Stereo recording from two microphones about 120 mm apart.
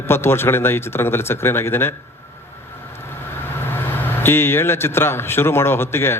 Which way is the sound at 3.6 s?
20° left (ahead or behind).